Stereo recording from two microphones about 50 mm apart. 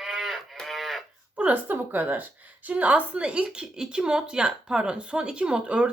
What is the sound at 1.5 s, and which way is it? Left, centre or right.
Speech, right.